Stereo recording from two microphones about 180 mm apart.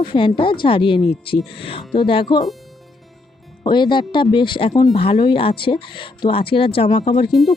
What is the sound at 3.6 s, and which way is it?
Speech, 25° left (ahead or behind).